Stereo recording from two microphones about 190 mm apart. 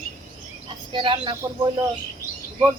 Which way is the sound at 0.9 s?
25° right (ahead or behind).